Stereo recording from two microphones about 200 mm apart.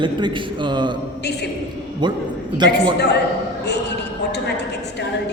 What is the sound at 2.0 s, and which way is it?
Speech, 25° right (ahead or behind).